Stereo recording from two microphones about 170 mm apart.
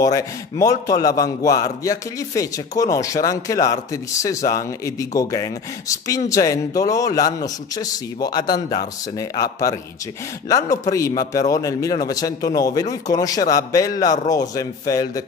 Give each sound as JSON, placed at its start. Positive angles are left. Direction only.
{"t": 0.0, "sound": "a man's voice", "side_deg": 20}